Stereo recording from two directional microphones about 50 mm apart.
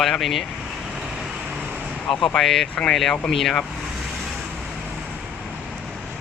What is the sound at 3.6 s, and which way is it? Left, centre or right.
Vehicle, centre.